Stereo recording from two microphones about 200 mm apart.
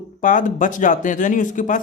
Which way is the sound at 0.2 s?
40° left (ahead or behind).